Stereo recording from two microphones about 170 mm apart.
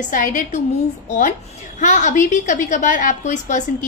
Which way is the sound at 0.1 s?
50° left (ahead or behind).